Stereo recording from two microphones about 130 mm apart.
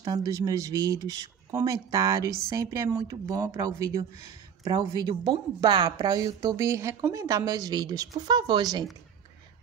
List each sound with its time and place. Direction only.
0.0 s speech: 25° right (ahead or behind)